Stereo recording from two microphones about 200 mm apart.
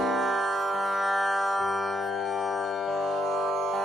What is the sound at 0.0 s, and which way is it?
Music, centre (ahead or behind).